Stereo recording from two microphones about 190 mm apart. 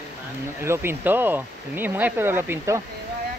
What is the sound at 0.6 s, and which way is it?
Speech, 15° right (ahead or behind).